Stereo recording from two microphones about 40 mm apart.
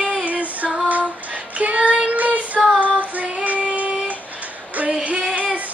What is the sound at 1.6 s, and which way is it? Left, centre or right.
Child singing, right.